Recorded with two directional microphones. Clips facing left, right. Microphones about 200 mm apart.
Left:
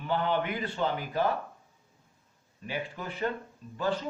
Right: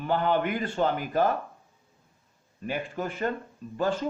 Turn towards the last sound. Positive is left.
turn(degrees=-50)  # may be behind; listen again after turning